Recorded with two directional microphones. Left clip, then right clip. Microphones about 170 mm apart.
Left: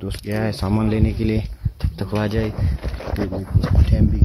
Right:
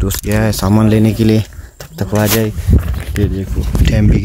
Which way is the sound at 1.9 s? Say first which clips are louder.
Right 9 dB; 5° right (ahead or behind).